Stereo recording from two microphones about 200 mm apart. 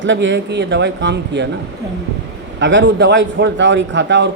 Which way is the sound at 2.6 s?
65° right (ahead or behind).